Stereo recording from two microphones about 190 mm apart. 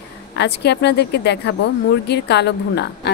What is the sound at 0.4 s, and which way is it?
Speech, 65° left (ahead or behind).